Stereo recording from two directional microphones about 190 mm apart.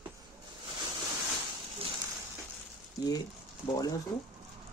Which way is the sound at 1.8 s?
30° right (ahead or behind).